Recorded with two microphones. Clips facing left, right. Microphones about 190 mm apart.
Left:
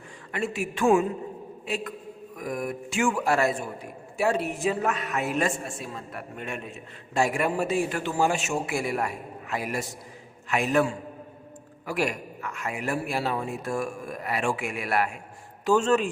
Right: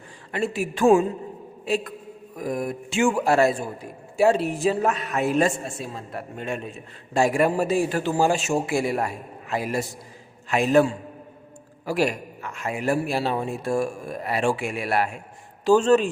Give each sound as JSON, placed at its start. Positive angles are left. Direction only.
{"t": 0.3, "sound": "a man's voice", "side_deg": -30}
{"t": 11.9, "sound": "a man's voice", "side_deg": -30}